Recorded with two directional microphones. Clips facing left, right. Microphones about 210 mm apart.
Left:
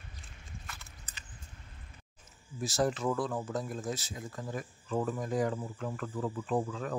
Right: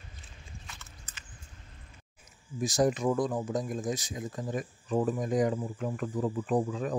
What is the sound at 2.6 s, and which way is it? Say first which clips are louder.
Speech: right 4 dB; 15° right (ahead or behind).